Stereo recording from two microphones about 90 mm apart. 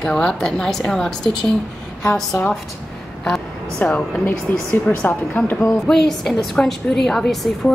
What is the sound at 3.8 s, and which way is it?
Speech, 20° left (ahead or behind).